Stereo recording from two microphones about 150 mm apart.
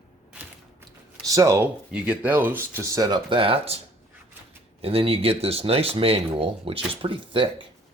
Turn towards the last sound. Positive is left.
turn(degrees=-35)  # may be behind; listen again after turning